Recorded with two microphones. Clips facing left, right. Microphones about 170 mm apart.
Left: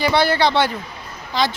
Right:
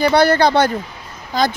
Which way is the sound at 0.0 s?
45° right (ahead or behind).